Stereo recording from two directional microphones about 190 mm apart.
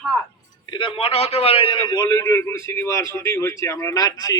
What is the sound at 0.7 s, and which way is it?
A man's voice, 25° left (ahead or behind).